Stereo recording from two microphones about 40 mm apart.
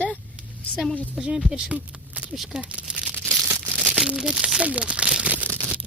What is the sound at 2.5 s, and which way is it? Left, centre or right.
Speech, right.